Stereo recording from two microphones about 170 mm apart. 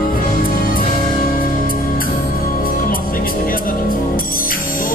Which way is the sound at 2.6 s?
55° left (ahead or behind).